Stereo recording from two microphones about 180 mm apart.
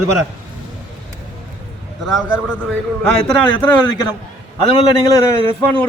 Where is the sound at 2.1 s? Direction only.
5° right (ahead or behind).